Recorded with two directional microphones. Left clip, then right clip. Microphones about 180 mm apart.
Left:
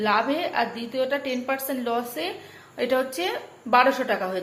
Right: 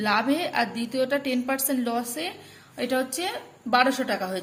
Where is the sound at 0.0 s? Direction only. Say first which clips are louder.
Left 1 dB; 35° right (ahead or behind).